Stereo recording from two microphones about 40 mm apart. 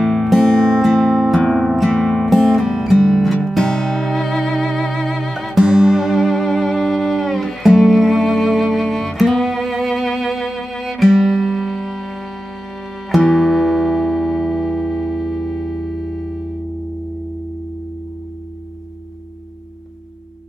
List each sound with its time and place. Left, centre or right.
0.0 s music: centre
2.7 s music: centre
3.0 s music: centre
5.6 s music: centre
6.3 s music: centre